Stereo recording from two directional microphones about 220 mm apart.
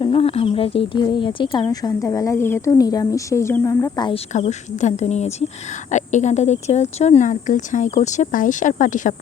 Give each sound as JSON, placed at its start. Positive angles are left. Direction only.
{"t": 0.0, "sound": "speech", "side_deg": 25}
{"t": 4.3, "sound": "speech", "side_deg": 30}